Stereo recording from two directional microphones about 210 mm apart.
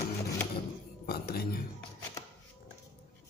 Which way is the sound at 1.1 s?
50° left (ahead or behind).